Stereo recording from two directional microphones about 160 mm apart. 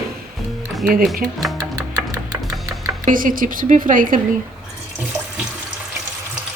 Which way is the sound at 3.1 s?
60° right (ahead or behind).